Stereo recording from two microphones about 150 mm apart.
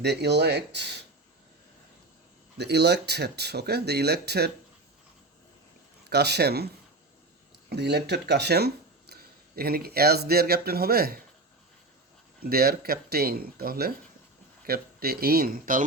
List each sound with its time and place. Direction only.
0.0 s speech: 90° right
2.6 s speech: 90° right
6.1 s speech: 90° right
7.7 s speech: 90° right
12.4 s speech: 90° right; by 15.8 s 70° right (ahead or behind)